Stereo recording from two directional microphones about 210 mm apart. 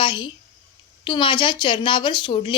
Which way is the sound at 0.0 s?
25° left (ahead or behind).